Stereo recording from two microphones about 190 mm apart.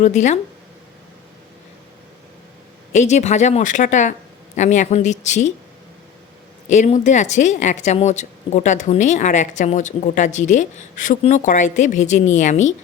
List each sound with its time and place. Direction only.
0.0 s a woman's voice: 40° left (ahead or behind)
2.9 s a woman's voice: 40° left (ahead or behind)
6.7 s a woman's voice: 40° left (ahead or behind)